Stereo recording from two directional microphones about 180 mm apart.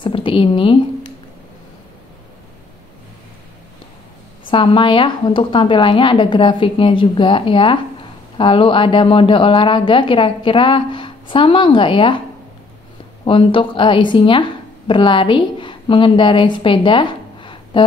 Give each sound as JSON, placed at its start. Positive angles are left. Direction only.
{"t": 0.0, "sound": "a woman's voice", "side_deg": 30}
{"t": 4.5, "sound": "a woman's voice", "side_deg": 30}
{"t": 13.2, "sound": "a woman's voice", "side_deg": 30}